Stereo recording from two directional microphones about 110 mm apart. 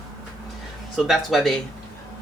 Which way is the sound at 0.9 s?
Centre (ahead or behind).